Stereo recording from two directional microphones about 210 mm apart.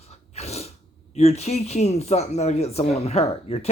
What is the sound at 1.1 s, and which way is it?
Speech, 30° left (ahead or behind).